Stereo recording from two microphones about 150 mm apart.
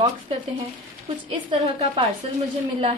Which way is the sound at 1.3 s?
35° right (ahead or behind).